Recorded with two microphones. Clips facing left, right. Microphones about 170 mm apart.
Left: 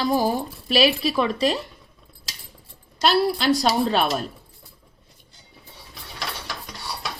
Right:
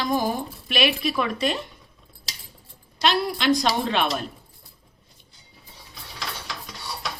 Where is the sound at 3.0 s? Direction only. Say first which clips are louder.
Left 3 dB; 40° left (ahead or behind).